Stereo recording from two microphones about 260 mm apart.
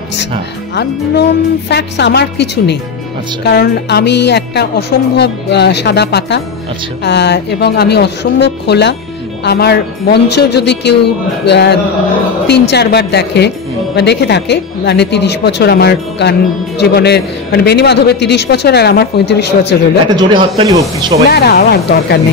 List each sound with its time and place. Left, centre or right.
0.7 s speech: left
20.2 s speech: centre
21.3 s speech: left